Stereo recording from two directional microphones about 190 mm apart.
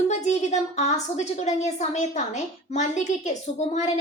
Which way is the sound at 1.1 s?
35° left (ahead or behind).